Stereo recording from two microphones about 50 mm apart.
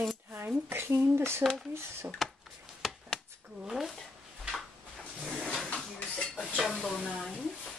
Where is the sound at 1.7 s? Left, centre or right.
Right.